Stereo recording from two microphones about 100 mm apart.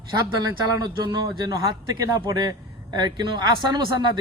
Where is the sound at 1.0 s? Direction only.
45° right (ahead or behind).